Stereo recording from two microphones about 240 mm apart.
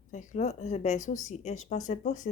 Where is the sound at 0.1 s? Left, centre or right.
Left.